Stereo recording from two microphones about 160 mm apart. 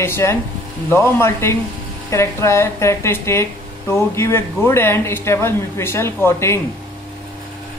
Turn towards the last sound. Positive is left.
turn(degrees=15)  # may be behind; listen again after turning